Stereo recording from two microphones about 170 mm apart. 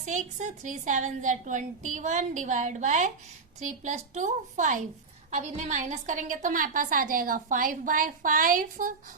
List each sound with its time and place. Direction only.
0.0 s a woman's voice: 45° right (ahead or behind)